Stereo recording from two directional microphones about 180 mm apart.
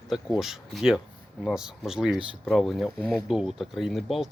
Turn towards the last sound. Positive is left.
turn(degrees=0)  # may be behind; listen again after turning